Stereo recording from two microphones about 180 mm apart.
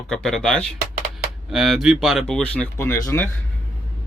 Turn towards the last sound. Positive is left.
turn(degrees=15)  # may be behind; listen again after turning